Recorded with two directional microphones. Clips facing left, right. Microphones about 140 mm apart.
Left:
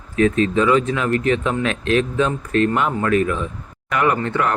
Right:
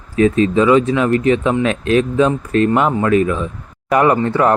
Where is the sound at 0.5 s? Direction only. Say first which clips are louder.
Right 5 dB; 30° right (ahead or behind).